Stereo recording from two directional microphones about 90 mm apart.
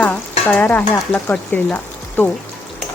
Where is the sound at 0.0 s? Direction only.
15° left (ahead or behind).